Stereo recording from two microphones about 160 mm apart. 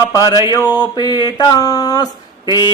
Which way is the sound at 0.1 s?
20° left (ahead or behind).